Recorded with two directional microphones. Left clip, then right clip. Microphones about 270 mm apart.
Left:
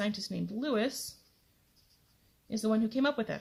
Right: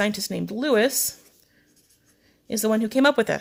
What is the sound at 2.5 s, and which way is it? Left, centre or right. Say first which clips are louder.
Speech: right 9 dB; right.